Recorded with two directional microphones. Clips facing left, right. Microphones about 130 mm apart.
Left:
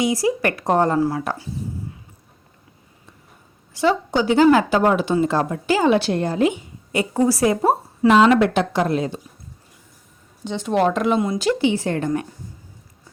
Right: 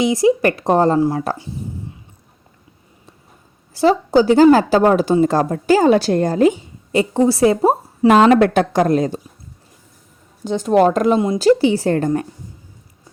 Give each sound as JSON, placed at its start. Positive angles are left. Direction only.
{"t": 0.0, "sound": "a woman's voice", "side_deg": -25}
{"t": 3.8, "sound": "a woman's voice", "side_deg": -35}
{"t": 7.7, "sound": "a woman's voice", "side_deg": -45}
{"t": 10.4, "sound": "a woman's voice", "side_deg": -40}